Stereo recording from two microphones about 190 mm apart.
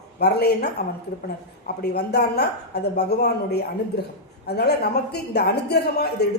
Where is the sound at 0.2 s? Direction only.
60° left (ahead or behind).